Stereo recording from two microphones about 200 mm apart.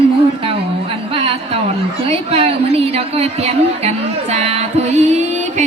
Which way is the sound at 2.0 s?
30° right (ahead or behind).